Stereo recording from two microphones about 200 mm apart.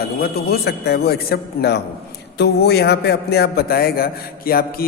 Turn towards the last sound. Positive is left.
turn(degrees=50)  # may be behind; listen again after turning